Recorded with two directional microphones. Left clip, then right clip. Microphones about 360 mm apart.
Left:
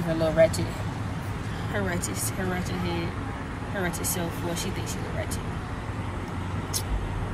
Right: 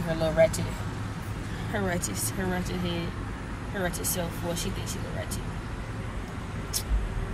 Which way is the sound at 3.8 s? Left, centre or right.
Centre.